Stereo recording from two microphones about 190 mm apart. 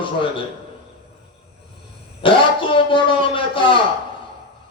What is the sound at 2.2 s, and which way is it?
Music, 25° left (ahead or behind).